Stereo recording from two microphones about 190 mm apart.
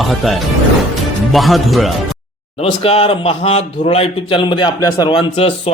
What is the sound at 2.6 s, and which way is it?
Speech, 30° left (ahead or behind).